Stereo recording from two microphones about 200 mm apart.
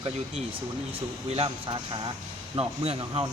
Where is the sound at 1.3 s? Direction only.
25° right (ahead or behind).